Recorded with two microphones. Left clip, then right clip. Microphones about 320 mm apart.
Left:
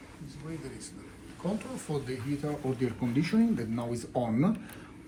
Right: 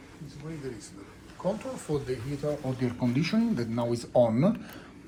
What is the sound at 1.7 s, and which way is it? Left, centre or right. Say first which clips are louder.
Speech: right 4 dB; right.